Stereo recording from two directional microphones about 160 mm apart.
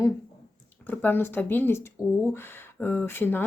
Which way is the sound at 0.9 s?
10° left (ahead or behind).